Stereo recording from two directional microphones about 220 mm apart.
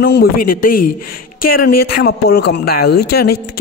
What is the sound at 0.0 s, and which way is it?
A man's voice, 45° left (ahead or behind).